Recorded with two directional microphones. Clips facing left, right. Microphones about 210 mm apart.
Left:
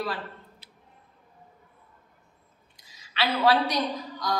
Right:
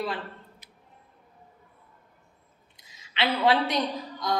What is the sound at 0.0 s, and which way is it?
Speech, 20° right (ahead or behind).